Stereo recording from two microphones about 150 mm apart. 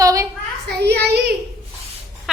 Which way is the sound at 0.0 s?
20° right (ahead or behind).